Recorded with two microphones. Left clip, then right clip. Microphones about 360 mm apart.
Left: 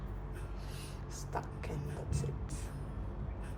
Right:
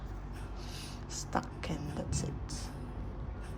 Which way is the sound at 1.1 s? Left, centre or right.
Right.